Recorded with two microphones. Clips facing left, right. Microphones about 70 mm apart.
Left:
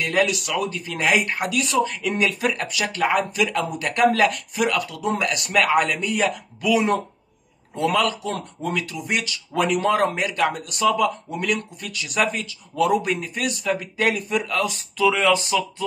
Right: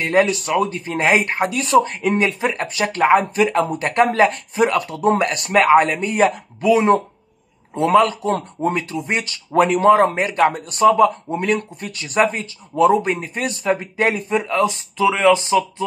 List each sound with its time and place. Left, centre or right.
0.0 s speech: right